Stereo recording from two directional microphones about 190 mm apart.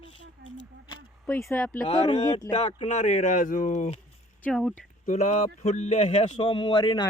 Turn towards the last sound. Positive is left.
turn(degrees=25)  # may be behind; listen again after turning